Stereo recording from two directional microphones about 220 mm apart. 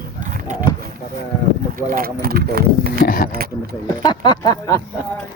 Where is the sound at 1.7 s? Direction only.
40° right (ahead or behind).